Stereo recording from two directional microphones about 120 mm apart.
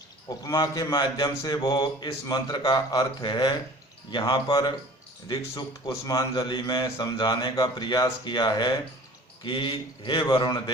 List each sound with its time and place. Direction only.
0.3 s speech: 35° left (ahead or behind)